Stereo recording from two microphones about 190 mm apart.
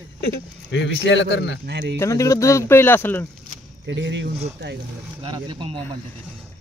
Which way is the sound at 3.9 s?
70° right (ahead or behind).